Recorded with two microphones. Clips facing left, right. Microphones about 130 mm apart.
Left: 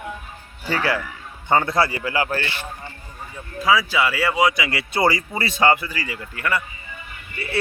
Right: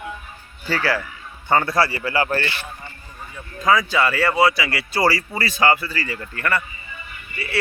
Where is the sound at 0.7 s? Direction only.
20° left (ahead or behind).